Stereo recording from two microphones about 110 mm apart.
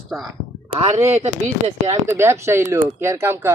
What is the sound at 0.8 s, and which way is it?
Speech, 75° right (ahead or behind).